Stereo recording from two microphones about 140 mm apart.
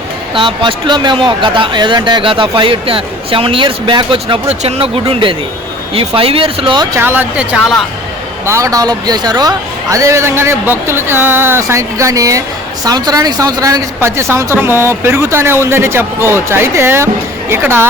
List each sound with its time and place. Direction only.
0.3 s speech: 35° right (ahead or behind)
4.4 s speech: 50° right (ahead or behind)
5.0 s speech: 35° right (ahead or behind)
6.9 s speech: 15° right (ahead or behind)
8.4 s a man's voice: 20° right (ahead or behind)